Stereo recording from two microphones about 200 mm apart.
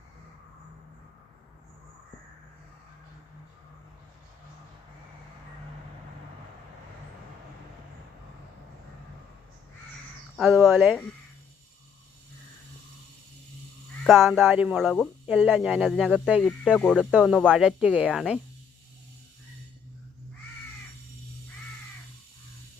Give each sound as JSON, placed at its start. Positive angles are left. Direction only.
{"t": 10.3, "sound": "speech", "side_deg": 0}
{"t": 14.1, "sound": "speech", "side_deg": 0}